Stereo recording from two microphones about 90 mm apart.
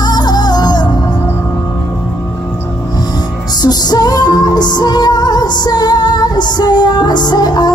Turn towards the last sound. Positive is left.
turn(degrees=50)  # may be behind; listen again after turning